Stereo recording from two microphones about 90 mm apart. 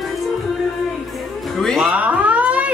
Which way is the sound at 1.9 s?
15° right (ahead or behind).